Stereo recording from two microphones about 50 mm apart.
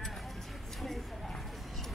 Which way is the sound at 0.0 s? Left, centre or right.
Centre.